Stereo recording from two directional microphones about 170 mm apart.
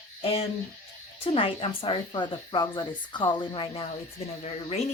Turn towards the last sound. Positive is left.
turn(degrees=40)  # may be behind; listen again after turning